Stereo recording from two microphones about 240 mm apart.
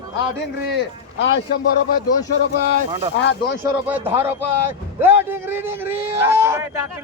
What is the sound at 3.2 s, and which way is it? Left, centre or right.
Speech, left.